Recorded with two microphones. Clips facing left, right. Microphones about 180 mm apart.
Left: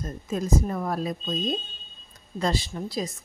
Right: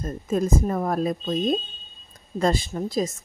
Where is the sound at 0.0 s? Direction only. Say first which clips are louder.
Right 5 dB; 50° right (ahead or behind).